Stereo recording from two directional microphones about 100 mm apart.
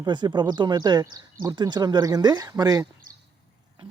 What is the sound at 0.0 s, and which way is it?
Speech, 50° right (ahead or behind).